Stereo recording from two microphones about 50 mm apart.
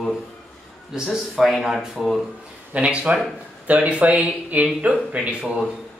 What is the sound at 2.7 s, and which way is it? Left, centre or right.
Speech, right.